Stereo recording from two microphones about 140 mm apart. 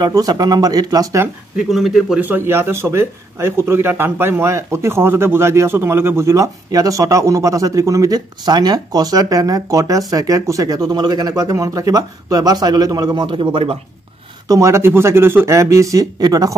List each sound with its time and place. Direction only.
0.0 s speech: 25° right (ahead or behind)
1.6 s speech: centre (ahead or behind)
2.2 s speech: 15° right (ahead or behind); by 13.7 s 40° right (ahead or behind)
14.5 s speech: 20° right (ahead or behind)